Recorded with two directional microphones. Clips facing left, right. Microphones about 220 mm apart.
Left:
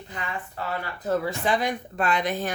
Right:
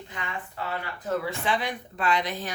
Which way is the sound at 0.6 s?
40° left (ahead or behind).